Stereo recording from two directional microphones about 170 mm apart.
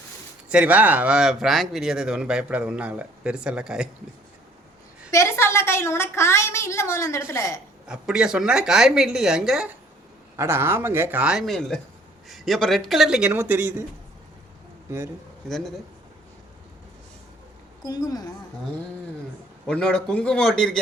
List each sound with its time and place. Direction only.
0.4 s speech: 5° right (ahead or behind)
5.1 s a woman's voice: 15° left (ahead or behind)
7.9 s speech: 5° right (ahead or behind)
10.3 s speech: 15° right (ahead or behind)
14.8 s speech: 15° right (ahead or behind)
15.4 s speech: centre (ahead or behind)
17.8 s a woman's voice: 20° left (ahead or behind)
19.6 s speech: 5° left (ahead or behind)